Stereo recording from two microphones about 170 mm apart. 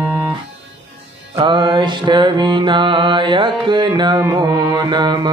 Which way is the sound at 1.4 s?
25° right (ahead or behind).